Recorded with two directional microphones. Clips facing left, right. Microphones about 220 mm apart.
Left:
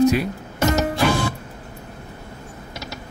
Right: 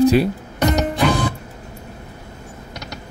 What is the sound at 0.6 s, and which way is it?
Music, 5° left (ahead or behind).